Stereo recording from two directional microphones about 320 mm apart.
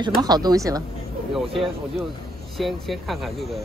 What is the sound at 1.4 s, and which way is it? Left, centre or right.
Speech, centre.